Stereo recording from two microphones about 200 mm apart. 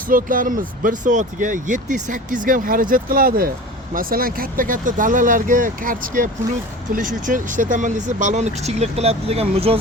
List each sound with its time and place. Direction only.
0.1 s speech: 45° right (ahead or behind)